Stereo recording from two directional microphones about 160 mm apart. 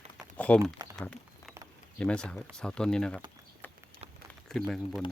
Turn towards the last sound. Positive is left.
turn(degrees=5)  # may be behind; listen again after turning